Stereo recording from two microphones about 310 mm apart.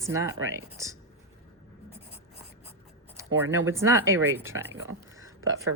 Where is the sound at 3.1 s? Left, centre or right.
Centre.